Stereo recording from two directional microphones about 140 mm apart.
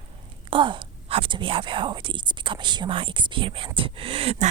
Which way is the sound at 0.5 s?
35° right (ahead or behind).